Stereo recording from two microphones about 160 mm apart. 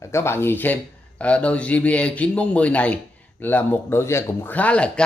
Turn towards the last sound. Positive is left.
turn(degrees=5)  # may be behind; listen again after turning